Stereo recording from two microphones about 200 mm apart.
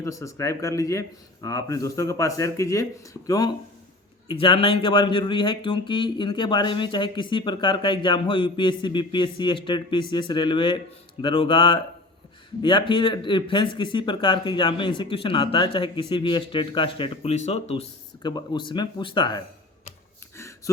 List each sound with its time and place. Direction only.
0.0 s speech: 15° left (ahead or behind); by 17.8 s 35° left (ahead or behind)
18.2 s speech: 20° left (ahead or behind)